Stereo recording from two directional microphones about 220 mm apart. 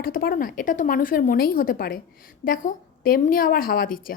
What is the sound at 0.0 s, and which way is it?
A woman's voice, 40° left (ahead or behind).